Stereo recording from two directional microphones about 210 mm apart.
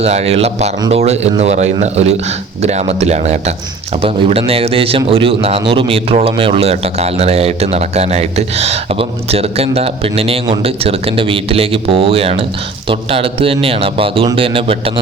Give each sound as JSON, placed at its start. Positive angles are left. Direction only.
{"t": 0.0, "sound": "speech", "side_deg": -30}